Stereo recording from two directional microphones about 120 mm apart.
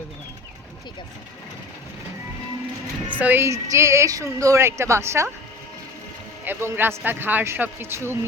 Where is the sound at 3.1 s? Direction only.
15° right (ahead or behind).